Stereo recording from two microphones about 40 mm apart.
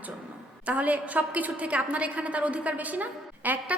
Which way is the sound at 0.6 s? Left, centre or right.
Right.